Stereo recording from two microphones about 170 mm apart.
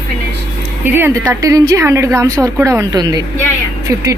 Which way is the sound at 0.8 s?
10° right (ahead or behind).